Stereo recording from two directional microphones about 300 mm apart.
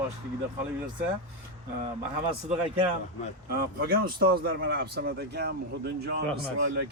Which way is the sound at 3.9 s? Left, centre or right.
Right.